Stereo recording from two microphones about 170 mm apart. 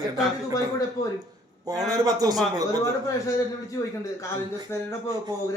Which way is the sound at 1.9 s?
20° right (ahead or behind).